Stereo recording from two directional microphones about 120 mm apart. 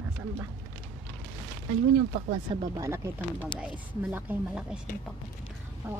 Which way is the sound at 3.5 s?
15° right (ahead or behind).